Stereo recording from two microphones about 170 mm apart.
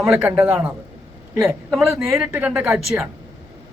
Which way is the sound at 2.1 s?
10° right (ahead or behind).